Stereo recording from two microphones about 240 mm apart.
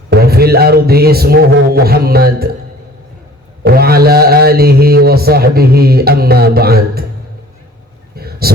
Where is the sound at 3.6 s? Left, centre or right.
Right.